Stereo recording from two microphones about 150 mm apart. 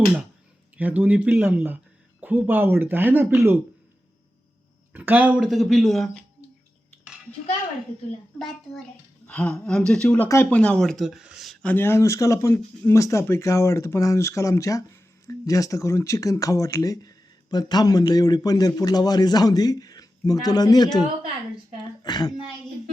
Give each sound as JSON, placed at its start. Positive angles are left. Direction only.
{"t": 0.8, "sound": "speech", "side_deg": -10}
{"t": 4.9, "sound": "speech", "side_deg": -10}
{"t": 5.4, "sound": "speech", "side_deg": 0}
{"t": 8.4, "sound": "a woman's voice", "side_deg": 0}
{"t": 11.7, "sound": "speech", "side_deg": 15}
{"t": 22.0, "sound": "a woman's voice", "side_deg": 30}